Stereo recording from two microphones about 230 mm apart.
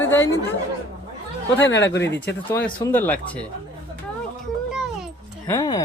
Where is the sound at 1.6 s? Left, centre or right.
Left.